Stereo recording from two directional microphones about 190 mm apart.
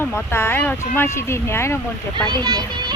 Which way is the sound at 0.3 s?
15° left (ahead or behind).